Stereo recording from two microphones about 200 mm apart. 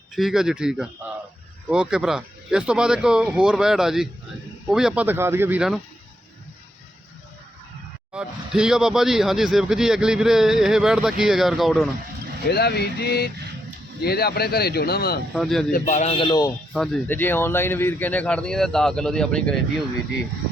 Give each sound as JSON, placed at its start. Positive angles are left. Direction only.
{"t": 0.2, "sound": "speech", "side_deg": 0}
{"t": 8.1, "sound": "speech", "side_deg": -5}
{"t": 12.5, "sound": "a man's voice", "side_deg": 55}
{"t": 15.3, "sound": "speech", "side_deg": 0}
{"t": 15.7, "sound": "speech", "side_deg": 35}
{"t": 16.7, "sound": "speech", "side_deg": 0}